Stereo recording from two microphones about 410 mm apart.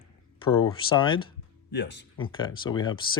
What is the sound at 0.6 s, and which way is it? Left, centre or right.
Speech, centre.